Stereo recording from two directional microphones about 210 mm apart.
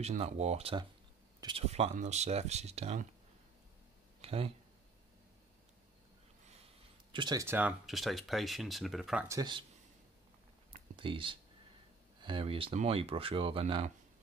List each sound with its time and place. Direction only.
0.0 s speech: 30° right (ahead or behind)
4.2 s a sound: 30° right (ahead or behind)
7.1 s speech: 20° right (ahead or behind); by 9.4 s 5° right (ahead or behind)
9.4 s speech: 20° right (ahead or behind)
11.0 s speech: 25° right (ahead or behind)